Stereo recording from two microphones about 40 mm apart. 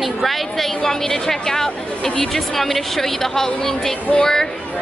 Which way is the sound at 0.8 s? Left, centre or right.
Centre.